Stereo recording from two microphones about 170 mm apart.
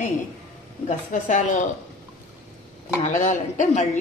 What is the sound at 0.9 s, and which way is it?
Speech, 45° left (ahead or behind).